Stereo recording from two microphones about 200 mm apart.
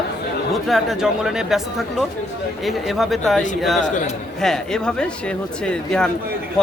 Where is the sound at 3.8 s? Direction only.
40° left (ahead or behind).